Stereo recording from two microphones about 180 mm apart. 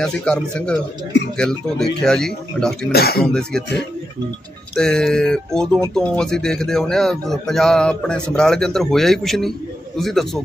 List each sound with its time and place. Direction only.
0.0 s a man's voice: 5° left (ahead or behind)
1.8 s a man's voice: 5° left (ahead or behind)
2.9 s speech: 60° left (ahead or behind)
3.2 s a man's voice: 5° left (ahead or behind)